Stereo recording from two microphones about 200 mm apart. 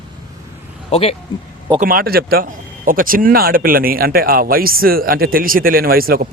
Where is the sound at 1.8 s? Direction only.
45° right (ahead or behind).